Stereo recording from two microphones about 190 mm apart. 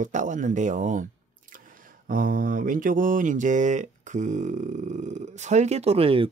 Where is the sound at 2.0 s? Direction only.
45° right (ahead or behind); by 6.3 s 30° right (ahead or behind).